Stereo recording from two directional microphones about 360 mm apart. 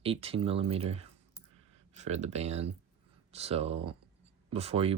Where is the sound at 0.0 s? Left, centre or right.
Centre.